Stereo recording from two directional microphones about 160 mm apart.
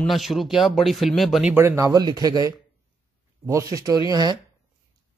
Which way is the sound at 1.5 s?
15° right (ahead or behind).